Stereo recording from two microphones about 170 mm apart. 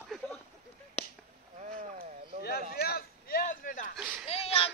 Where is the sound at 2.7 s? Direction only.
65° left (ahead or behind); by 3.9 s 50° left (ahead or behind).